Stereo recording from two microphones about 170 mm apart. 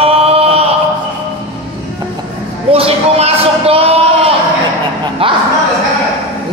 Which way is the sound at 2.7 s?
35° right (ahead or behind).